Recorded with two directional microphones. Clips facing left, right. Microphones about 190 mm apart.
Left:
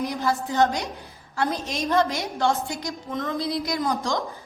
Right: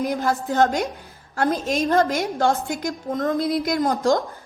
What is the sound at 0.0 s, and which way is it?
A woman's voice, 50° right (ahead or behind).